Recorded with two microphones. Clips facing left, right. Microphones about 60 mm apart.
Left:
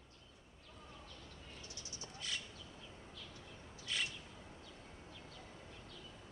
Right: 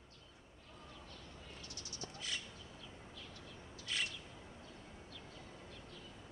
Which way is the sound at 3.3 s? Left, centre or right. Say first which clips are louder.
Right 1 dB; left.